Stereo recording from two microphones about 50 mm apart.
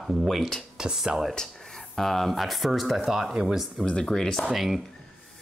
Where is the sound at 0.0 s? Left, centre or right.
Centre.